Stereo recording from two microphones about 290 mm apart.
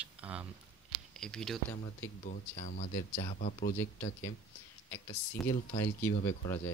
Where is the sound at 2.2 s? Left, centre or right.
Left.